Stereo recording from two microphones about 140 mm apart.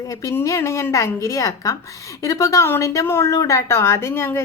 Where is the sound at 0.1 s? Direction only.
20° left (ahead or behind).